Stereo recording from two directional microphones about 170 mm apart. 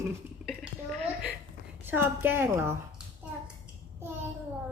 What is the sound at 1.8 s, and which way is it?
Speech, 10° right (ahead or behind).